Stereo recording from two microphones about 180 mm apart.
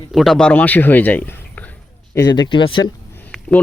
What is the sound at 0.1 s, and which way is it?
A man's voice, centre (ahead or behind).